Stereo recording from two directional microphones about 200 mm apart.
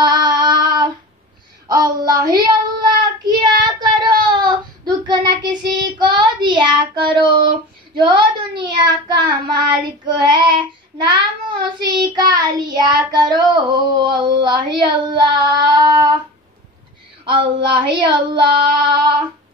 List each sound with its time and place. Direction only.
0.0 s child singing: 20° right (ahead or behind)
17.2 s child singing: 25° right (ahead or behind)